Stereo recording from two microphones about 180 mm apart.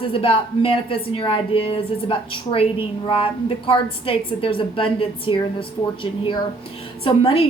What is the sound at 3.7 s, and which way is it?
A woman's voice, 30° left (ahead or behind).